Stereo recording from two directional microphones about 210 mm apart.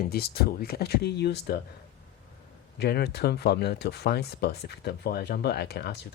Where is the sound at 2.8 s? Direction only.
50° left (ahead or behind).